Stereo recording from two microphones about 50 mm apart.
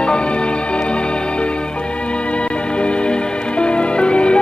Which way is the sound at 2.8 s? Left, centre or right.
Left.